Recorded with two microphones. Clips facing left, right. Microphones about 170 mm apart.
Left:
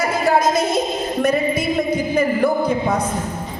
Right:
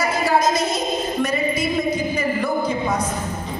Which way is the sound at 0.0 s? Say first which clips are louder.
Left 2 dB; 55° left (ahead or behind).